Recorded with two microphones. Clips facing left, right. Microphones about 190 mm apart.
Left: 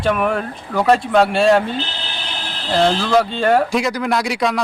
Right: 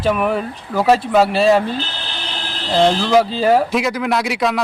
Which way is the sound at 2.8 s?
15° right (ahead or behind).